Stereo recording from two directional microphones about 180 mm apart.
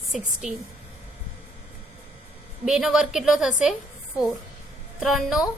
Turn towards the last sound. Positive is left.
turn(degrees=0)  # may be behind; listen again after turning